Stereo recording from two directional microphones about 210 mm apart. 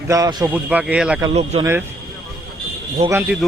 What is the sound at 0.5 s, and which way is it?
Speech, 5° right (ahead or behind).